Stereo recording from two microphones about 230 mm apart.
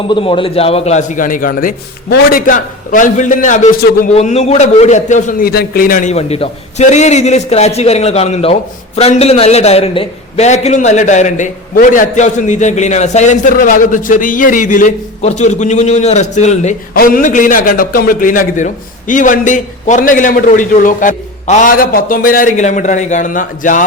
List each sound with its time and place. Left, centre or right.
0.1 s a man's voice: left